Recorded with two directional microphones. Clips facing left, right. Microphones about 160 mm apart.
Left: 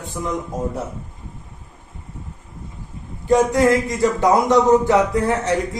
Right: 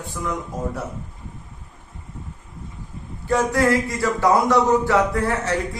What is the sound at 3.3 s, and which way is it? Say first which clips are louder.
A man's voice: left 4 dB; 20° left (ahead or behind).